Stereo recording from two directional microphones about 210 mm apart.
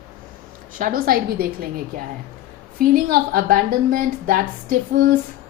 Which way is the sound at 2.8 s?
40° right (ahead or behind).